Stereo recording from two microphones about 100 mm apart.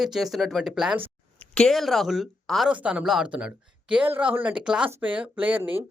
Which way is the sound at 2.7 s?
15° right (ahead or behind).